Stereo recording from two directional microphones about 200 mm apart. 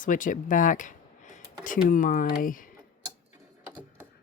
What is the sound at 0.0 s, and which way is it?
Speech, 40° left (ahead or behind).